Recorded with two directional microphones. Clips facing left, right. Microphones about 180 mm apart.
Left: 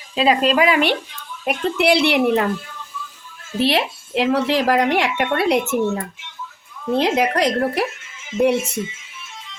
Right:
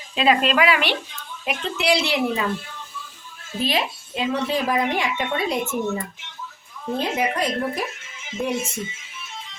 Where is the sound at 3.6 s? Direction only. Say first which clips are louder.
Left 5 dB; 70° left (ahead or behind).